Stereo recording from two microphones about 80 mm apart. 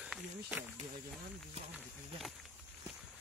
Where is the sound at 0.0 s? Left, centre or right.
Centre.